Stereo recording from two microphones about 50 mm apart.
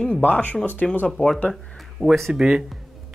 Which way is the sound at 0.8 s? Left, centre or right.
Centre.